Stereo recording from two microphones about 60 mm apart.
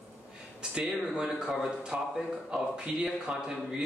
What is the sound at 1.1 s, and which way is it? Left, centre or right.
Speech, centre.